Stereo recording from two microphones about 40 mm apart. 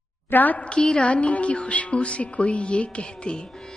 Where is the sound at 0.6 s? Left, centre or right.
Left.